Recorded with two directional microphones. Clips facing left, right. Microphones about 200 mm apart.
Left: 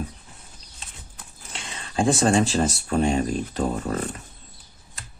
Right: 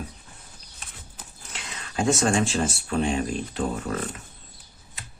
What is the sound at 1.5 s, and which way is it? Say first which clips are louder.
Speech: left 3 dB; 30° left (ahead or behind).